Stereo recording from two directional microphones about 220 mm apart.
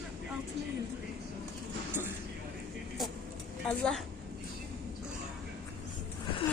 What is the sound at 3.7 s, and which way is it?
Speech, 5° left (ahead or behind).